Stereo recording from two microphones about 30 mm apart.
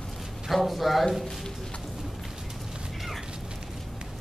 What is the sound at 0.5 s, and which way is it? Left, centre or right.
Speech, centre.